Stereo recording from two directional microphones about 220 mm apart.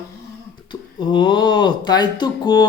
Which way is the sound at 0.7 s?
20° left (ahead or behind).